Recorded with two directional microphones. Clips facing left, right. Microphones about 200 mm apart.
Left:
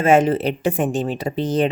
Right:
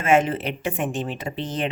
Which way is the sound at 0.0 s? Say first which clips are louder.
Left 5 dB; 35° left (ahead or behind).